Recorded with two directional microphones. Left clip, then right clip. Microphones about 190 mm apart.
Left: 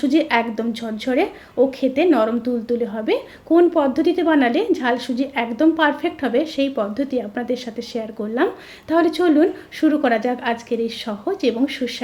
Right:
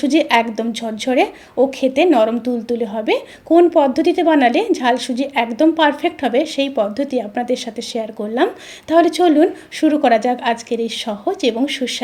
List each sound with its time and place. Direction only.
0.0 s a woman's voice: 20° right (ahead or behind)